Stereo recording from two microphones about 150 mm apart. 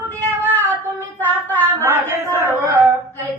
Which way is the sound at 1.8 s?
15° right (ahead or behind).